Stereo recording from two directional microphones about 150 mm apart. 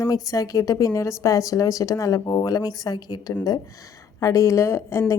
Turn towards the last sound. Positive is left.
turn(degrees=15)  # may be behind; listen again after turning